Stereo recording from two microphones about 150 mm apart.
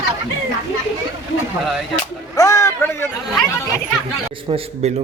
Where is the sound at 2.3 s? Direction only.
20° left (ahead or behind).